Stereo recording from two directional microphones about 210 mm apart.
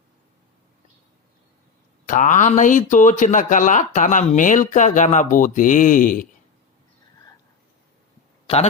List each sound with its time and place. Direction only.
2.0 s speech: 35° left (ahead or behind)